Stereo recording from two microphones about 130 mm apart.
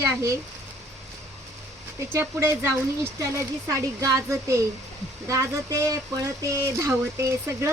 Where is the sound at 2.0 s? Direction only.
20° right (ahead or behind).